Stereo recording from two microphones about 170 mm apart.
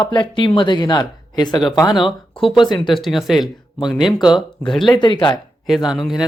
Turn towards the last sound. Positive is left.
turn(degrees=0)  # may be behind; listen again after turning